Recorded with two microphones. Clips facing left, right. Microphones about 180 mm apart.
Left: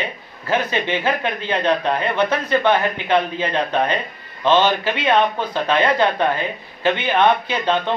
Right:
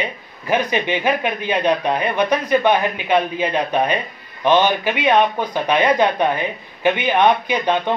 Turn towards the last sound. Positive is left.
turn(degrees=-15)  # may be behind; listen again after turning